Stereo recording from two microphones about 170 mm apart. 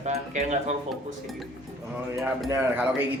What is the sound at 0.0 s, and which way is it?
Speech, 40° right (ahead or behind).